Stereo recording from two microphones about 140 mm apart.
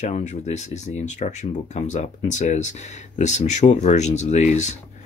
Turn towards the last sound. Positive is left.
turn(degrees=55)  # may be behind; listen again after turning